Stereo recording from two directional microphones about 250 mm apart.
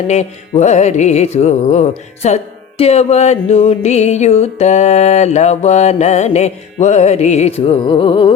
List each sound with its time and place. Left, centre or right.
0.1 s music: left